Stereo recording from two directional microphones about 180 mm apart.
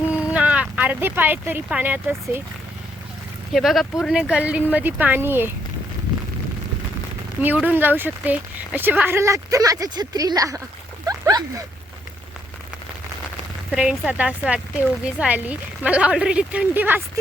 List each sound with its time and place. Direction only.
0.2 s speech: 5° right (ahead or behind)
3.5 s speech: centre (ahead or behind)
7.6 s speech: 10° right (ahead or behind)
11.0 s a sound: 20° right (ahead or behind)
13.7 s speech: 5° right (ahead or behind)